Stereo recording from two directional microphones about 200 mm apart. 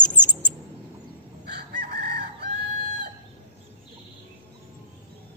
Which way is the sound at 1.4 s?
55° right (ahead or behind).